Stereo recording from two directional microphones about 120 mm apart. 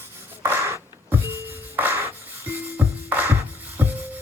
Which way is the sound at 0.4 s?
15° right (ahead or behind).